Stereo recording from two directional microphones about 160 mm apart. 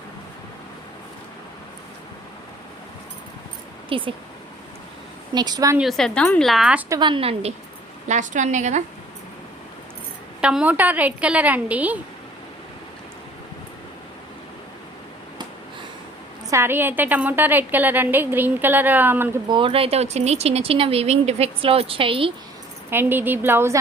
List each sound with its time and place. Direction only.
3.8 s speech: 35° right (ahead or behind)
5.3 s a woman's voice: 25° right (ahead or behind)
5.7 s a woman's voice: centre (ahead or behind)
7.0 s speech: 35° right (ahead or behind)
8.0 s a woman's voice: 50° right (ahead or behind)
10.4 s a woman's voice: 5° right (ahead or behind)
16.5 s a woman's voice: 15° right (ahead or behind)
19.5 s speech: 30° right (ahead or behind)
22.9 s a woman's voice: 15° right (ahead or behind)